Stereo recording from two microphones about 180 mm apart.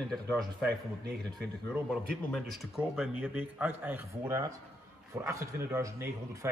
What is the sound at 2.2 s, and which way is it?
A man's voice, centre (ahead or behind).